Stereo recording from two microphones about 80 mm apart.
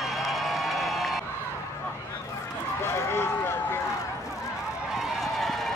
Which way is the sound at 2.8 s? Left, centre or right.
Left.